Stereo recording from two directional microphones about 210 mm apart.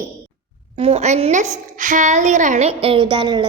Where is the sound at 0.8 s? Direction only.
30° right (ahead or behind).